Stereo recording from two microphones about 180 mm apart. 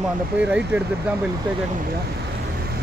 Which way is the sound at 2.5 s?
60° right (ahead or behind).